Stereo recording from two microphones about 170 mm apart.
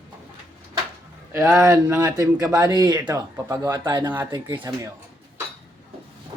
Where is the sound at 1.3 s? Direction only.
15° right (ahead or behind).